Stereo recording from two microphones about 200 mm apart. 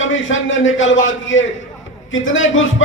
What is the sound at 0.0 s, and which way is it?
Speech, 70° left (ahead or behind).